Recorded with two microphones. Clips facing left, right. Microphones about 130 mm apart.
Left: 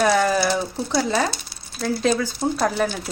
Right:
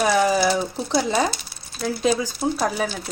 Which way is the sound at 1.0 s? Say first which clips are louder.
Right 1 dB; 20° right (ahead or behind).